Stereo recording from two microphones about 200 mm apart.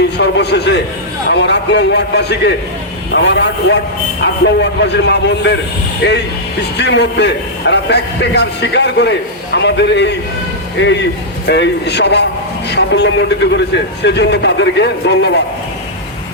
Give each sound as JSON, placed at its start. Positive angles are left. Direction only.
{"t": 0.0, "sound": "a man's voice", "side_deg": 60}
{"t": 6.7, "sound": "a man's voice", "side_deg": 60}